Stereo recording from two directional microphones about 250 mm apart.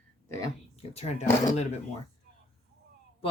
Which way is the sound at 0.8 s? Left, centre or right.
Left.